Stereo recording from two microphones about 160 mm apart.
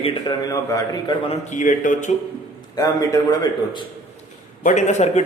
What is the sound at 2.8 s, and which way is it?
A man's voice, 25° left (ahead or behind).